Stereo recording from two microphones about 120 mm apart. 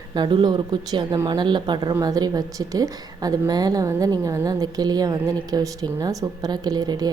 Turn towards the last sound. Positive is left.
turn(degrees=-35)  # may be behind; listen again after turning